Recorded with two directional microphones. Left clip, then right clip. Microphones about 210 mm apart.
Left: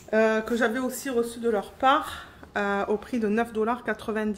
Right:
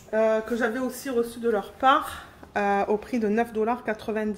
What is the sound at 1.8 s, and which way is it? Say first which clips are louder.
A woman's voice: right 1 dB; centre (ahead or behind).